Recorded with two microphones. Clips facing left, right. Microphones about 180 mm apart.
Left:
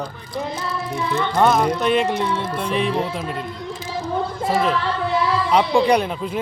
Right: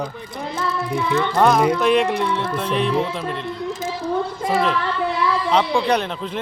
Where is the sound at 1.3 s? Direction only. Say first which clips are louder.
Right 1 dB; centre (ahead or behind).